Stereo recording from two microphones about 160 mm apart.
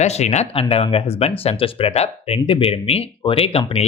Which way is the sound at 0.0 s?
45° left (ahead or behind).